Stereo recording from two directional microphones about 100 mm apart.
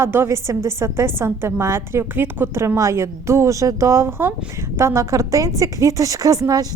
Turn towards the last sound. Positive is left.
turn(degrees=-35)  # may be behind; listen again after turning